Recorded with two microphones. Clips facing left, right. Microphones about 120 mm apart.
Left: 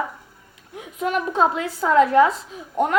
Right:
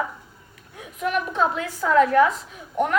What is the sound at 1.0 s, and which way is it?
A woman's voice, 30° left (ahead or behind).